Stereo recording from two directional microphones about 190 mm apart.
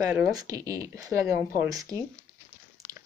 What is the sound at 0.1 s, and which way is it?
Speech, 15° right (ahead or behind).